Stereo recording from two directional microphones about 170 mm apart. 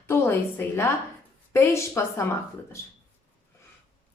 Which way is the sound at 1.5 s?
15° left (ahead or behind).